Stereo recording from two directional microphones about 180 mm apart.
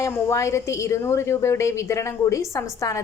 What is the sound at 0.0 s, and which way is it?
A woman's voice, 15° left (ahead or behind).